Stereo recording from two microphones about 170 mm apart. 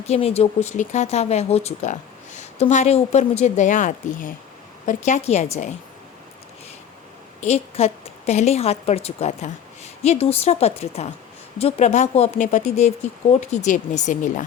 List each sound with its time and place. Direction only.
0.0 s speech: 35° left (ahead or behind)
7.4 s speech: 40° left (ahead or behind)